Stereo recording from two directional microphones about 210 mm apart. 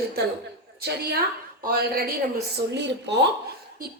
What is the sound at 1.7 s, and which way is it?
Speech, 45° right (ahead or behind).